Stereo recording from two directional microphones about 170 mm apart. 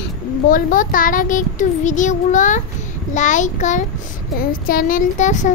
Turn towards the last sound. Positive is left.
turn(degrees=45)  # may be behind; listen again after turning